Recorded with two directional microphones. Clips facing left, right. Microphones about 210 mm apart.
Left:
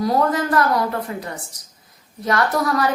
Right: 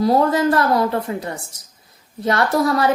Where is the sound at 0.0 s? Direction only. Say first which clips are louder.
Right 4 dB; 30° right (ahead or behind).